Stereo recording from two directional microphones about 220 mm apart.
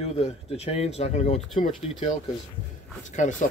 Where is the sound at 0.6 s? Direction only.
30° left (ahead or behind).